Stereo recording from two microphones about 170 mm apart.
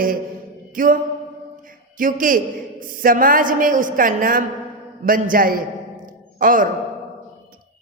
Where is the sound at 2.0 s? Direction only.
55° right (ahead or behind).